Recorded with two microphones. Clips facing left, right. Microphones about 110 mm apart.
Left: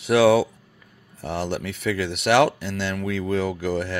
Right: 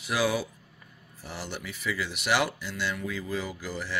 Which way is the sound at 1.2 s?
65° left (ahead or behind).